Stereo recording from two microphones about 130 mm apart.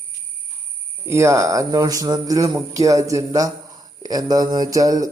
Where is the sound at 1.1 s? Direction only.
25° right (ahead or behind).